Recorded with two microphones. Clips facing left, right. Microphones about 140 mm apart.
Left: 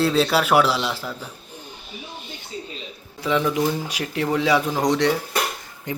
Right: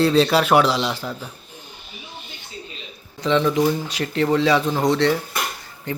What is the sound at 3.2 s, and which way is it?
Speech, 10° left (ahead or behind).